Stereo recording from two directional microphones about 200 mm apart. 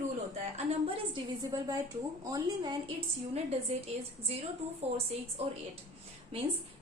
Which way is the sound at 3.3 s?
30° right (ahead or behind).